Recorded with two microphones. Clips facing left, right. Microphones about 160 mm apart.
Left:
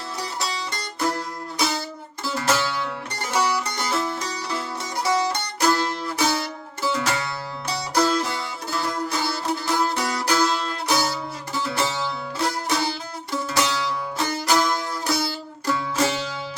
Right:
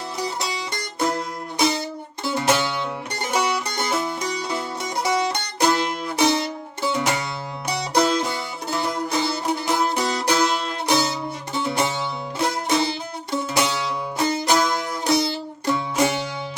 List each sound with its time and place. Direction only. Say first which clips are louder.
0.2 s music: right 2 dB; 20° right (ahead or behind)